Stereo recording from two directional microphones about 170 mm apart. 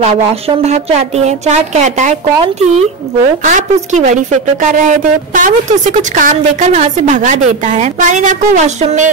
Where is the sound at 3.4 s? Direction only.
45° right (ahead or behind).